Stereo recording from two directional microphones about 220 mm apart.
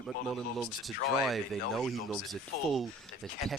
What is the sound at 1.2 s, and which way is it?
Speech, centre (ahead or behind).